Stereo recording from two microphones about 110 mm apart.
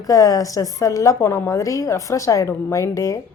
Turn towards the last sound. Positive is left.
turn(degrees=30)  # may be behind; listen again after turning